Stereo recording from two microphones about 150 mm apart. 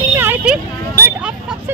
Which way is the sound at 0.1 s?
15° right (ahead or behind).